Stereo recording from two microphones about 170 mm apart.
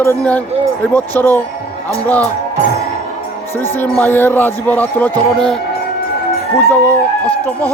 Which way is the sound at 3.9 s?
10° left (ahead or behind).